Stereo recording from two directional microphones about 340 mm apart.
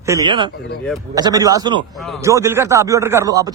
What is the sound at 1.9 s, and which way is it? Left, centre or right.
Speech, centre.